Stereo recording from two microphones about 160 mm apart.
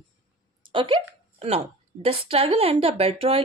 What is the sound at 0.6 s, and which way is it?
A woman's voice, 30° right (ahead or behind).